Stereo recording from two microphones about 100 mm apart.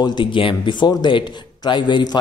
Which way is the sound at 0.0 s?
50° left (ahead or behind).